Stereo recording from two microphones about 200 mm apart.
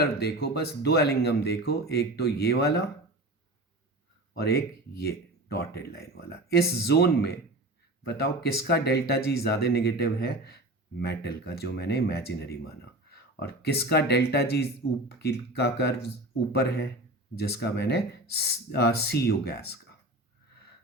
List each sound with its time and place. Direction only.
0.0 s speech: 55° left (ahead or behind)
4.4 s speech: 50° left (ahead or behind)